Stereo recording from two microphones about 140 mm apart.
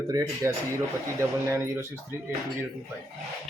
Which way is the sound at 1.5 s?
20° right (ahead or behind).